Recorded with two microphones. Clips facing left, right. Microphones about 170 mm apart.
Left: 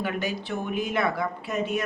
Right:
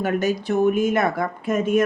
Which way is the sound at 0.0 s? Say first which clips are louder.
Right 7 dB; 45° right (ahead or behind).